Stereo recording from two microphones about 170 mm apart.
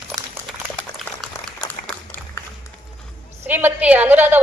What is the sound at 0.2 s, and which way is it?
Dog, 45° right (ahead or behind).